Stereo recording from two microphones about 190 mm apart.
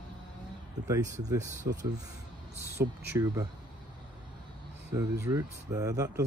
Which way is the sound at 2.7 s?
15° right (ahead or behind).